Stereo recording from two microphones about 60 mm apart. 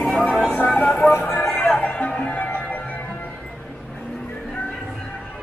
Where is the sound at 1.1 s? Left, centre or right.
Left.